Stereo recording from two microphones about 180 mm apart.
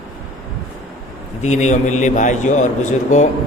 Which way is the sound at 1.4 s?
40° left (ahead or behind).